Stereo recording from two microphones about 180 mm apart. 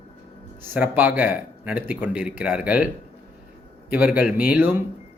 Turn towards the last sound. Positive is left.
turn(degrees=-10)  # may be behind; listen again after turning